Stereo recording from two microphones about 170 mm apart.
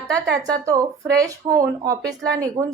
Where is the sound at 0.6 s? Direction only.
20° right (ahead or behind).